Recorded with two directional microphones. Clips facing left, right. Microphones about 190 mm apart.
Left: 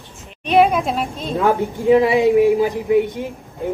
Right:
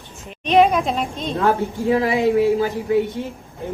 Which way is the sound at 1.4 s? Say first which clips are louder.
Left 2 dB; 20° left (ahead or behind).